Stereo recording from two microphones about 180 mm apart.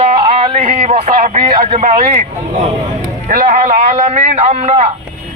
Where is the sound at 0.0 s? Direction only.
35° right (ahead or behind).